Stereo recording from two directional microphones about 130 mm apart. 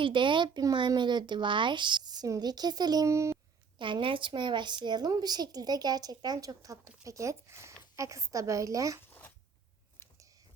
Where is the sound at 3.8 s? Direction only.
40° right (ahead or behind).